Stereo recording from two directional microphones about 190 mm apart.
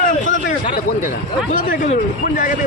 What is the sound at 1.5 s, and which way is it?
Speech, 45° left (ahead or behind).